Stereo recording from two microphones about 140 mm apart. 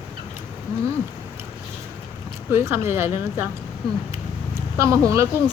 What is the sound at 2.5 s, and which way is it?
Speech, 20° right (ahead or behind).